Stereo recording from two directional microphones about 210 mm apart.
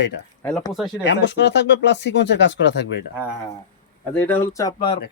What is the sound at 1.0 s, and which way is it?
Speech, 60° left (ahead or behind).